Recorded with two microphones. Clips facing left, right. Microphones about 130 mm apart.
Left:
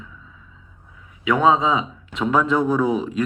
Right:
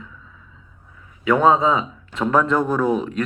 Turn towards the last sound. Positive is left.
turn(degrees=5)  # may be behind; listen again after turning